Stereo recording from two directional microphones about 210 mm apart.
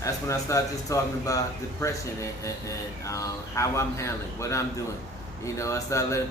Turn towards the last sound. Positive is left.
turn(degrees=15)  # may be behind; listen again after turning